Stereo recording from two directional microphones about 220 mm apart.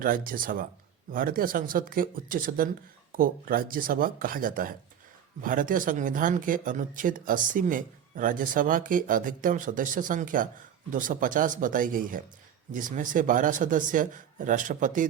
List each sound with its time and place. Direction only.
0.0 s speech: 40° right (ahead or behind)